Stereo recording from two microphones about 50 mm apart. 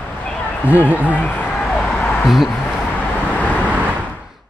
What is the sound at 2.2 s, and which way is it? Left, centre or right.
Speech, centre.